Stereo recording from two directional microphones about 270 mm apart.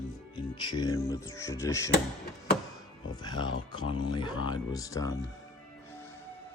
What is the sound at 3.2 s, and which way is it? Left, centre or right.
Speech, centre.